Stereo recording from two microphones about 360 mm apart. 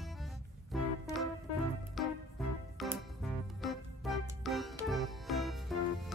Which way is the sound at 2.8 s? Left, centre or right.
Centre.